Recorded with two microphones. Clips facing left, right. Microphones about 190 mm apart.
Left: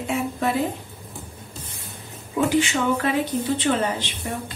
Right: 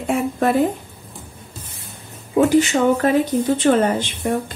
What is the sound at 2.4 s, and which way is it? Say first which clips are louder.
A woman's voice: right 6 dB; 40° right (ahead or behind).